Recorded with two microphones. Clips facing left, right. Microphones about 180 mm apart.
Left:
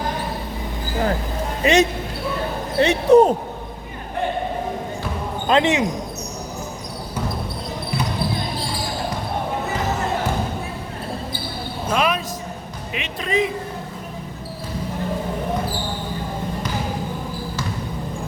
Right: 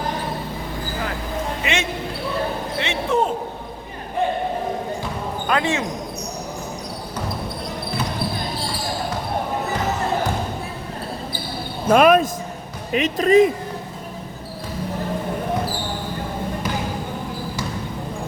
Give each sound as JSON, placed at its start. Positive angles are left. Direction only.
{"t": 1.6, "sound": "speech", "side_deg": 35}
{"t": 5.5, "sound": "speech", "side_deg": 20}
{"t": 11.9, "sound": "a sound", "side_deg": -50}
{"t": 12.9, "sound": "speech", "side_deg": -40}